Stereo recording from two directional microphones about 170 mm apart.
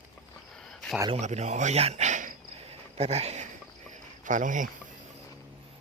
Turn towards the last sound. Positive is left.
turn(degrees=-50)  # may be behind; listen again after turning